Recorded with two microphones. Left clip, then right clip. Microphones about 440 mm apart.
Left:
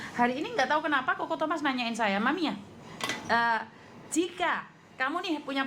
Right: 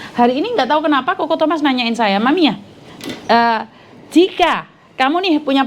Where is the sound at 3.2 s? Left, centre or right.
Right.